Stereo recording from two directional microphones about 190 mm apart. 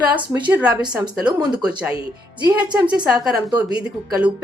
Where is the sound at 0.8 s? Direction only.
20° right (ahead or behind).